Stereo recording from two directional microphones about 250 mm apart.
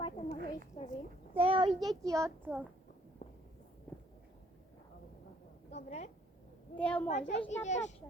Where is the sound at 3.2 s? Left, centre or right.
Left.